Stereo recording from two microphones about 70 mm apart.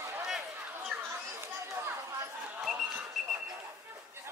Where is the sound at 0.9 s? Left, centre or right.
Centre.